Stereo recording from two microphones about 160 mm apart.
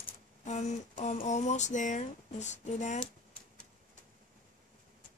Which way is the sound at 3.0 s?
5° left (ahead or behind).